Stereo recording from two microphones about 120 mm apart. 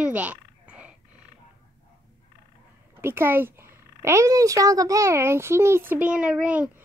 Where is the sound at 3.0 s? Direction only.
20° right (ahead or behind).